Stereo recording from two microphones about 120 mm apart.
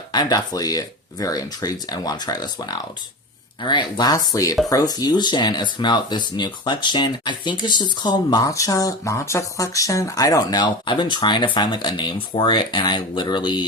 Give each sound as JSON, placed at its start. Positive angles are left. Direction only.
{"t": 0.1, "sound": "speech", "side_deg": 35}